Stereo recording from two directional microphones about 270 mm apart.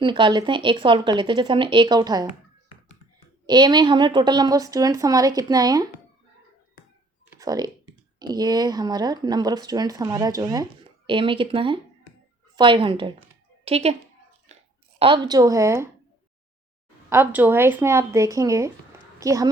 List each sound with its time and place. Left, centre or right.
0.0 s speech: centre
3.4 s speech: centre
7.3 s speech: centre
17.1 s speech: centre